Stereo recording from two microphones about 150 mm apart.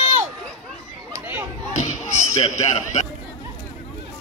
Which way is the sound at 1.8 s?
50° left (ahead or behind).